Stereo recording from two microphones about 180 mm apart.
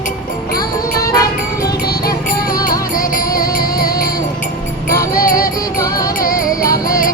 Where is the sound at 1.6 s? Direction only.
60° left (ahead or behind).